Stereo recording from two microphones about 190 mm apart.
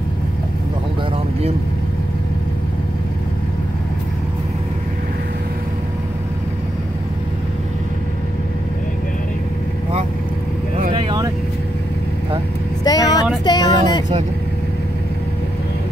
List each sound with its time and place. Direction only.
10.9 s vehicle: 25° right (ahead or behind)
12.8 s vehicle: 20° left (ahead or behind)
13.5 s a sound: 20° left (ahead or behind)